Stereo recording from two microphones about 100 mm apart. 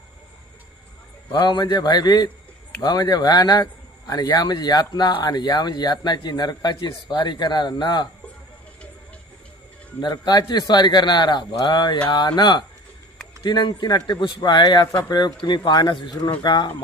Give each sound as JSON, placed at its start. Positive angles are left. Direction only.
{"t": 1.3, "sound": "a man's voice", "side_deg": 45}
{"t": 10.0, "sound": "a man's voice", "side_deg": 45}